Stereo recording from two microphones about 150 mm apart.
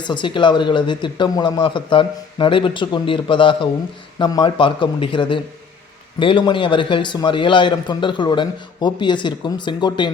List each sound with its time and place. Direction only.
0.0 s a man's voice: 30° left (ahead or behind)